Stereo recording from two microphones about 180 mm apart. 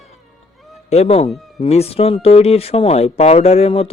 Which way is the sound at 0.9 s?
35° left (ahead or behind).